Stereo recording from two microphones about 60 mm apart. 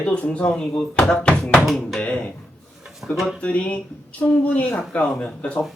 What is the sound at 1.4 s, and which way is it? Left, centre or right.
Speech, centre.